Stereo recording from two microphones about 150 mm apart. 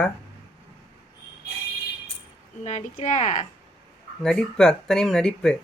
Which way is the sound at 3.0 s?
50° left (ahead or behind).